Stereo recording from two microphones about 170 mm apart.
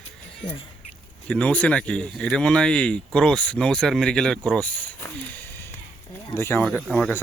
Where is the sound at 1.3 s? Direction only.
5° left (ahead or behind).